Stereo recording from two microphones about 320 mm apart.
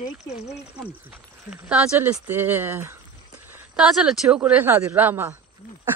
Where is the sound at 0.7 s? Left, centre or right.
Centre.